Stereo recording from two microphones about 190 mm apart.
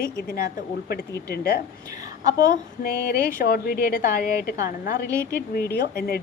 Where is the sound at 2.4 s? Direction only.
50° left (ahead or behind).